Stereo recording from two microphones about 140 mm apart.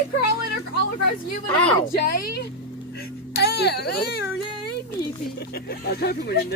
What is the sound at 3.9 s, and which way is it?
Speech, 90° left.